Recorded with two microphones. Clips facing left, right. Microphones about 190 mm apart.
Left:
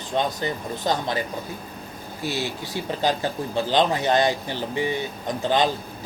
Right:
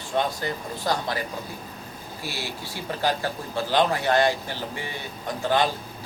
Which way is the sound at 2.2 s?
20° left (ahead or behind).